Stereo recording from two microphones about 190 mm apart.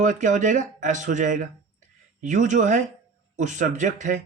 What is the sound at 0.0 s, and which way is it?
Speech, 40° right (ahead or behind).